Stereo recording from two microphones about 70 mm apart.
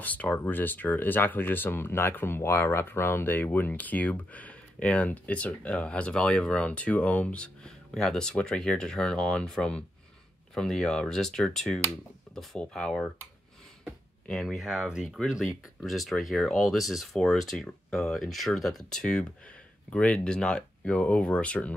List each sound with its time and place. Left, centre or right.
0.0 s speech: left
14.3 s speech: centre
14.6 s speech: centre